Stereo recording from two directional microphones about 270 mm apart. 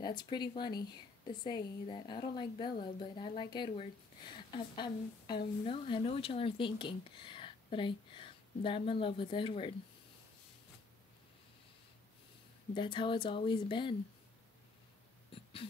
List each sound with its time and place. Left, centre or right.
0.0 s a woman's voice: centre
12.7 s a woman's voice: centre
15.3 s a sound: centre